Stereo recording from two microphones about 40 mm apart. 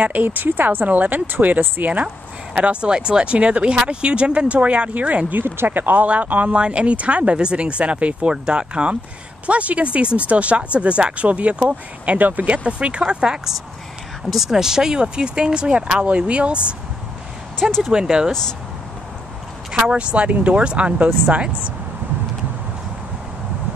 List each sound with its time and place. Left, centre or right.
0.0 s speech: right
2.5 s speech: right
5.4 s speech: right
6.0 s speech: right
6.5 s speech: right
12.6 s speech: right
14.3 s speech: centre; by 16.7 s right
17.6 s speech: centre
19.9 s speech: right